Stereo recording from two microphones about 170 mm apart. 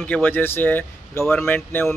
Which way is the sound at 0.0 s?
10° left (ahead or behind).